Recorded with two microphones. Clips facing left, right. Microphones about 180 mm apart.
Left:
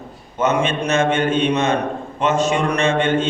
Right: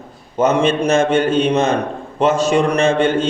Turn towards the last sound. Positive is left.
turn(degrees=-35)  # may be behind; listen again after turning